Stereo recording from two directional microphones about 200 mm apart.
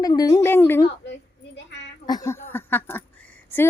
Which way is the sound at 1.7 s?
60° left (ahead or behind).